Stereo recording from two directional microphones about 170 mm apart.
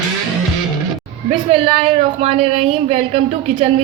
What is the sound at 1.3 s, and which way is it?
A woman's voice, 30° right (ahead or behind).